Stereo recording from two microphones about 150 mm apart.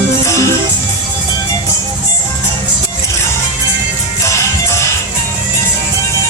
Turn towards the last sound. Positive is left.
turn(degrees=20)  # may be behind; listen again after turning